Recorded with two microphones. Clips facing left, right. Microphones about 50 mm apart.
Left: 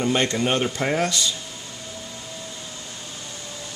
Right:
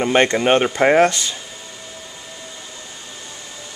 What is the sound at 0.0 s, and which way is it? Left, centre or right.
Speech, right.